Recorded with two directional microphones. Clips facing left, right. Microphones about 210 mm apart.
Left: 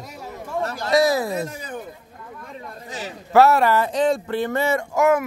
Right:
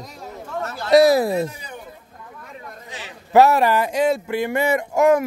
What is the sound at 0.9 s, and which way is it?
Speech, 35° right (ahead or behind).